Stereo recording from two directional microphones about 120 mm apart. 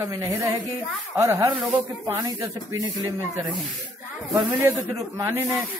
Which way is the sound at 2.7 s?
30° right (ahead or behind).